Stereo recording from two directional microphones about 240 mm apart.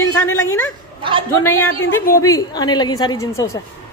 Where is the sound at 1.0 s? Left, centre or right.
Right.